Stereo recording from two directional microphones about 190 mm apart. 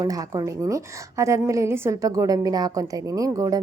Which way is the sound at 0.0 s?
20° right (ahead or behind).